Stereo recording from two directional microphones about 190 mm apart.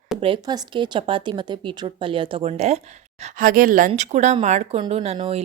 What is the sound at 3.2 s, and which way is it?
Speech, 45° right (ahead or behind).